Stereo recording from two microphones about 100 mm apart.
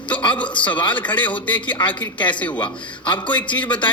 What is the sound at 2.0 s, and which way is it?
A man's voice, 50° left (ahead or behind).